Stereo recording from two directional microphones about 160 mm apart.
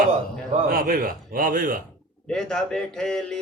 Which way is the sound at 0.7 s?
65° right (ahead or behind).